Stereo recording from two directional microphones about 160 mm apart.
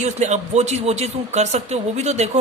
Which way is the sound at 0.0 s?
45° right (ahead or behind).